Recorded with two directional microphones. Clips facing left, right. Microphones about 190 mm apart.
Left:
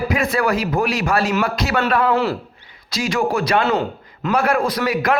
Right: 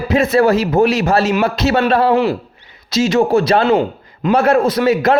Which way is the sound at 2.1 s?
15° right (ahead or behind).